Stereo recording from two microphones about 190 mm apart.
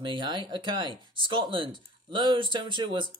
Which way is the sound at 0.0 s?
25° right (ahead or behind).